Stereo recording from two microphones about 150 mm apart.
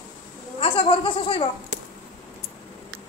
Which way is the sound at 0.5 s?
40° left (ahead or behind).